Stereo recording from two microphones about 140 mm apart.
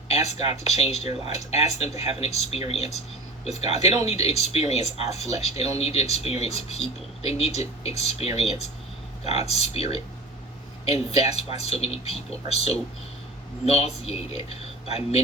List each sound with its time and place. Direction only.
0.1 s speech: 50° left (ahead or behind)